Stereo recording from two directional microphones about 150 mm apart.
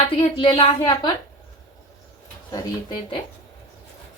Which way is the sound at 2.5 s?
30° left (ahead or behind).